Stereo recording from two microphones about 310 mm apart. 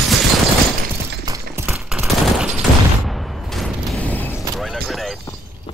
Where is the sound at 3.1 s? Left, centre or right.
Centre.